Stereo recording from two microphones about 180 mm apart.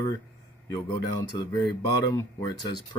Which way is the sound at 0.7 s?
20° left (ahead or behind).